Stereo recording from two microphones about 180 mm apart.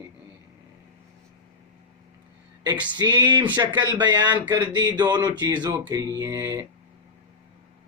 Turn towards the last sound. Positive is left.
turn(degrees=-20)  # may be behind; listen again after turning